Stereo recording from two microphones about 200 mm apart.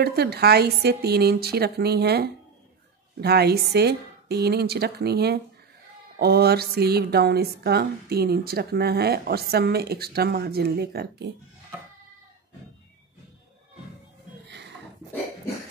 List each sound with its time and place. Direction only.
0.0 s speech: 55° right (ahead or behind)